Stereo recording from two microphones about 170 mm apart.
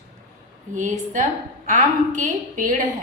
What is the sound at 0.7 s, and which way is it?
A woman's voice, 45° right (ahead or behind).